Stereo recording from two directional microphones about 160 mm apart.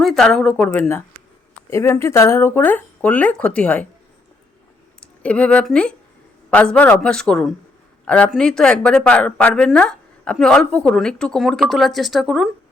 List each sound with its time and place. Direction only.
0.0 s speech: centre (ahead or behind)
5.2 s a woman's voice: 5° left (ahead or behind)